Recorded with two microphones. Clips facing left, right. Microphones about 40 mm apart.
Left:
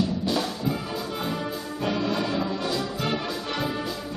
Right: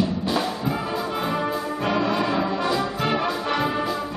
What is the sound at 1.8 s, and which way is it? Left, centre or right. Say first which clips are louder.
Brass instrument: right 3 dB; centre.